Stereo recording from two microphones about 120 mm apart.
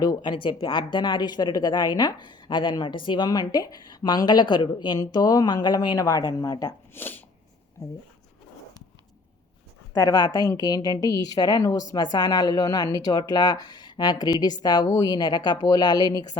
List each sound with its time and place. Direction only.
0.0 s speech: 35° left (ahead or behind)
6.9 s speech: 15° left (ahead or behind)
7.8 s speech: 30° left (ahead or behind)
9.9 s speech: 30° left (ahead or behind)